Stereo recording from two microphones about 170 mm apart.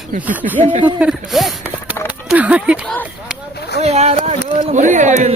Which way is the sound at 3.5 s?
75° left (ahead or behind).